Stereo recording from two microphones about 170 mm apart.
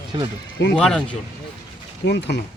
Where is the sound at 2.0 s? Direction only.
80° left.